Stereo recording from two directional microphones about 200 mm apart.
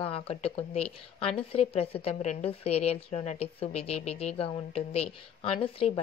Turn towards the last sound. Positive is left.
turn(degrees=30)  # may be behind; listen again after turning